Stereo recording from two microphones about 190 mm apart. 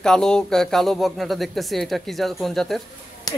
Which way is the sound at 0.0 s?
5° left (ahead or behind).